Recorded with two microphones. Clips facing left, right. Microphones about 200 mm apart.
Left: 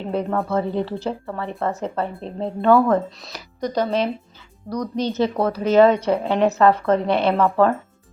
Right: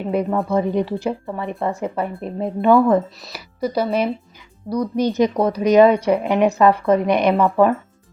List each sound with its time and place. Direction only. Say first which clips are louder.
0.1 s a woman's voice: right 3 dB; 10° right (ahead or behind)